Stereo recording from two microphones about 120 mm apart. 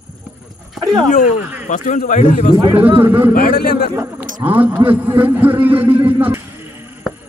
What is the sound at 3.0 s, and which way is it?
A man's voice, 15° right (ahead or behind).